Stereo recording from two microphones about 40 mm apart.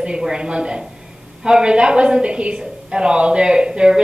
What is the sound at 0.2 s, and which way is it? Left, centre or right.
A woman's voice, right.